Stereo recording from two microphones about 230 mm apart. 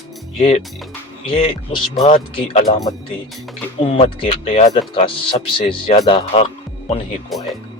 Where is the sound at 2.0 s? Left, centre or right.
Left.